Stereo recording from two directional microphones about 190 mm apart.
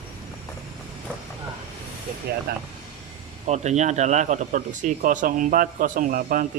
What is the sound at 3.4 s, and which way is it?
Speech, 35° right (ahead or behind).